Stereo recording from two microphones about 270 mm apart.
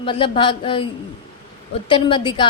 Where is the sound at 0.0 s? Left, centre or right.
Centre.